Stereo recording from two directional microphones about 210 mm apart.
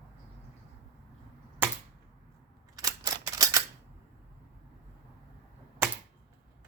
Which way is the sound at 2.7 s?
20° right (ahead or behind).